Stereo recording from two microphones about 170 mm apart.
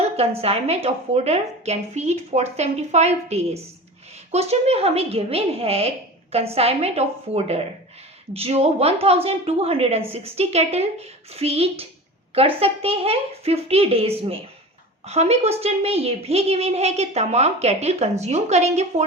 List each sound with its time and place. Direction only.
0.0 s a woman's voice: 35° right (ahead or behind)